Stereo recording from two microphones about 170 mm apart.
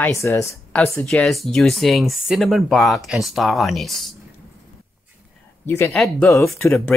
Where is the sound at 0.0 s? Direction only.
15° left (ahead or behind).